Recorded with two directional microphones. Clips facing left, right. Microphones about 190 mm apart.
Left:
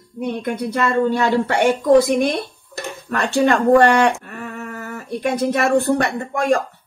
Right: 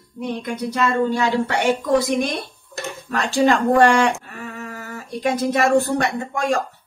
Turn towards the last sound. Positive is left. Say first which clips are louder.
# left 3 dB
turn(degrees=60)  # may be behind; listen again after turning